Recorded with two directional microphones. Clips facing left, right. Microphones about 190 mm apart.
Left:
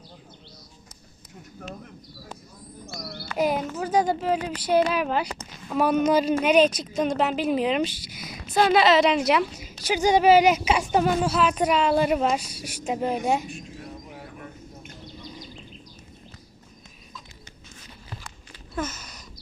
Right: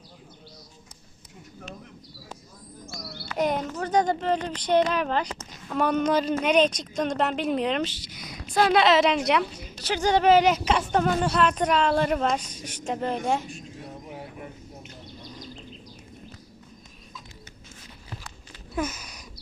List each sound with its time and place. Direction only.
2.8 s bird: 60° left (ahead or behind)
3.3 s a woman's voice: 5° left (ahead or behind)
18.7 s a sound: 10° right (ahead or behind)